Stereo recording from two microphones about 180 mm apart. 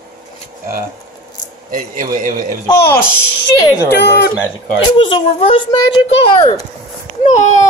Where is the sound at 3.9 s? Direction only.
70° left (ahead or behind).